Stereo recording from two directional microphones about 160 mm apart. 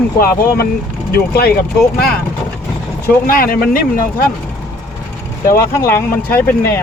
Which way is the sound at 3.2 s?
65° left (ahead or behind).